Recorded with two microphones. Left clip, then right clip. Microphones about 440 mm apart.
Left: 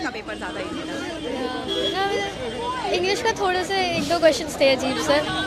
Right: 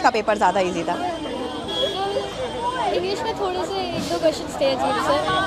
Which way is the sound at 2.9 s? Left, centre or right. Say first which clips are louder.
Left 2 dB; left.